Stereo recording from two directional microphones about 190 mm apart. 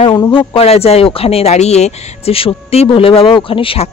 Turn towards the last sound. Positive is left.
turn(degrees=30)  # may be behind; listen again after turning